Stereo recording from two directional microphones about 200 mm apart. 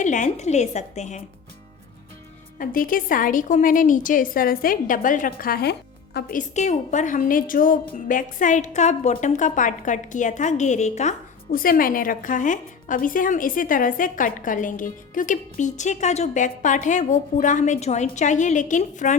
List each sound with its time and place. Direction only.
0.0 s a woman's voice: 40° left (ahead or behind)
2.6 s a woman's voice: 45° left (ahead or behind)